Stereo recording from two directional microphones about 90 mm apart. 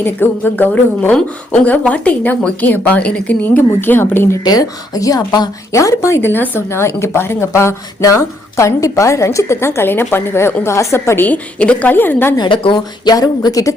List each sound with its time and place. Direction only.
0.0 s a woman's voice: 20° left (ahead or behind)
4.4 s speech: 45° left (ahead or behind)
5.7 s speech: 35° left (ahead or behind)
11.3 s a woman's voice: 15° left (ahead or behind)
12.4 s a woman's voice: 70° left (ahead or behind)
12.7 s speech: 50° left (ahead or behind)